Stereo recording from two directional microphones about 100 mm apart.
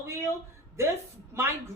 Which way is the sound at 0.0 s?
25° right (ahead or behind).